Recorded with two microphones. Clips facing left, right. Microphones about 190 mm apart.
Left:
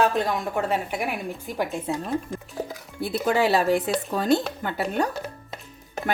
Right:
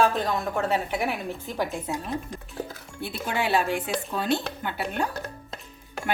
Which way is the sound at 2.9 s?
40° left (ahead or behind).